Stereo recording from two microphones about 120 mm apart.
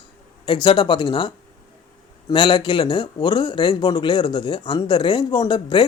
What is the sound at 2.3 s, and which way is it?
Speech, 40° left (ahead or behind).